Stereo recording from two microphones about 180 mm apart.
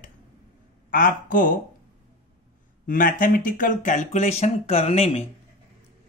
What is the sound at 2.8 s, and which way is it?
Speech, 50° left (ahead or behind).